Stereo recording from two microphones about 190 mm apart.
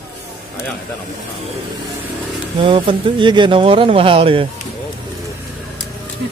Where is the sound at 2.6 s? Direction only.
25° right (ahead or behind).